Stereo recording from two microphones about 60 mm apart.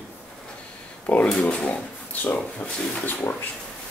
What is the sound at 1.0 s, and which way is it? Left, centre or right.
Speech, left.